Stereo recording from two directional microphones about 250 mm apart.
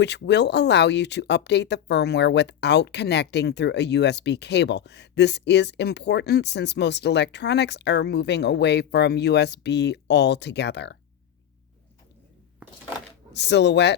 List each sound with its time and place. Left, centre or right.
0.0 s speech: left
13.3 s speech: left